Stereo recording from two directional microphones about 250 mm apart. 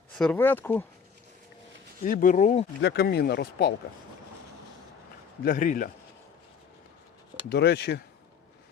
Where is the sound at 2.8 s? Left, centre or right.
Left.